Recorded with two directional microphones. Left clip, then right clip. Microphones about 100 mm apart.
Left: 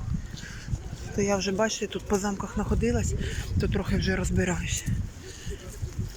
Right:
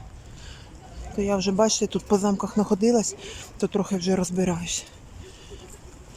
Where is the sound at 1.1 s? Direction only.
20° right (ahead or behind); by 4.3 s 35° right (ahead or behind).